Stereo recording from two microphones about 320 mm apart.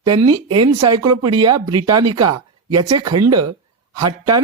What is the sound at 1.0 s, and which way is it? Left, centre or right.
Speech, right.